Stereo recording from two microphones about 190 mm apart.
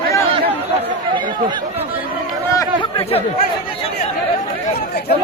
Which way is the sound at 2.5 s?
30° left (ahead or behind).